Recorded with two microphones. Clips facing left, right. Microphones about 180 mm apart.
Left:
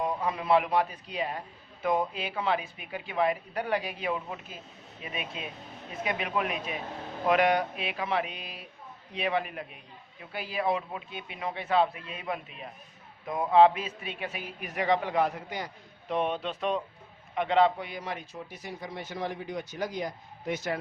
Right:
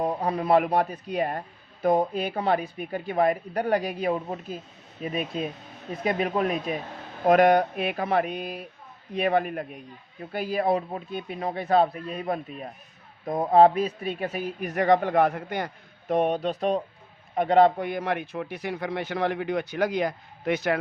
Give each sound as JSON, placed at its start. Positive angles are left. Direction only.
{"t": 0.0, "sound": "a man's voice", "side_deg": -35}